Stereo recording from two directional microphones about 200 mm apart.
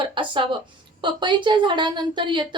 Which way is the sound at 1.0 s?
25° right (ahead or behind).